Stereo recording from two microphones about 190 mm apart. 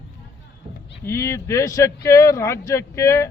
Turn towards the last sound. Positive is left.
turn(degrees=15)  # may be behind; listen again after turning